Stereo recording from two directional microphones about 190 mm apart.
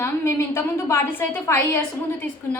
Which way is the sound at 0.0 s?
15° left (ahead or behind).